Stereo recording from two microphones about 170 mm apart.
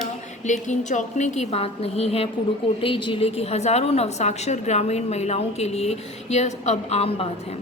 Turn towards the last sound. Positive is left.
turn(degrees=35)  # may be behind; listen again after turning